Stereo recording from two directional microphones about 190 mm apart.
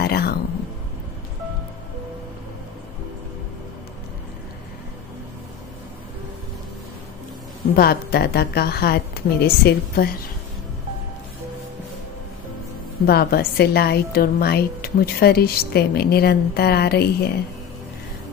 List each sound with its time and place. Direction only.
0.0 s a sound: 55° left (ahead or behind)
7.7 s a woman's voice: 55° left (ahead or behind)
13.0 s a woman's voice: 55° left (ahead or behind)